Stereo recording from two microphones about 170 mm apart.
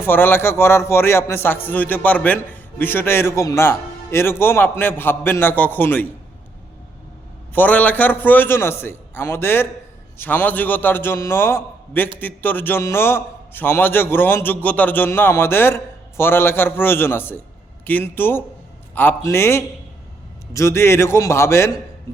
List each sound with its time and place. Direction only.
0.0 s a man's voice: 10° left (ahead or behind)
7.5 s a man's voice: 10° left (ahead or behind)